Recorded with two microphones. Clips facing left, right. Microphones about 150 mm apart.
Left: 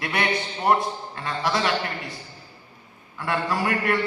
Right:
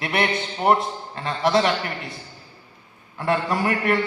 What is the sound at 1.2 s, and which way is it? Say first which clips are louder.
Speech: right 5 dB; 25° right (ahead or behind).